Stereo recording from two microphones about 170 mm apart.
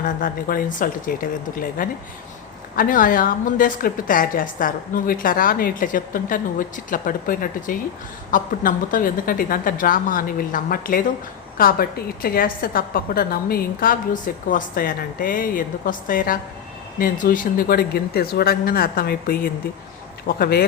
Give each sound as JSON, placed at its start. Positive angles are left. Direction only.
{"t": 0.0, "sound": "a woman's voice", "side_deg": 55}